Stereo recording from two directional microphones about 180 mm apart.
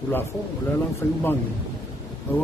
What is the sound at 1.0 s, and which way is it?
Speech, 15° left (ahead or behind).